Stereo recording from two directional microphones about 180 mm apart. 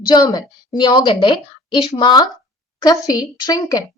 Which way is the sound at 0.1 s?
20° left (ahead or behind).